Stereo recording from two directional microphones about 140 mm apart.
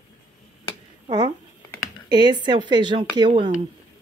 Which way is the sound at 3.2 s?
55° right (ahead or behind).